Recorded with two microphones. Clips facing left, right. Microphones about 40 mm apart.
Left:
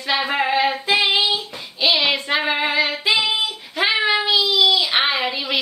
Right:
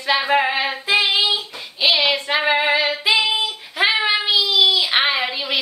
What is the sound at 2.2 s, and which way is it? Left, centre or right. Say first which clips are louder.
Female singing: right 2 dB; centre.